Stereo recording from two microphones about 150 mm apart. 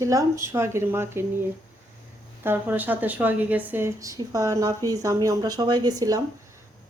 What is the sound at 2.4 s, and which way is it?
A woman's voice, 10° right (ahead or behind).